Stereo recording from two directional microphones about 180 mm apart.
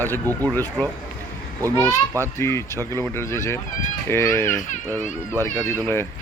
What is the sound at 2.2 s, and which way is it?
Speech, 15° left (ahead or behind).